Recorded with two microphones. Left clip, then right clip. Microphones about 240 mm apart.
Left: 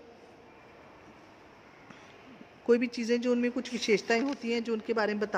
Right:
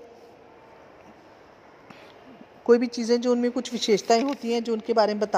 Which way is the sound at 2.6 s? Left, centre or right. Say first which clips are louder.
Right 6 dB; centre.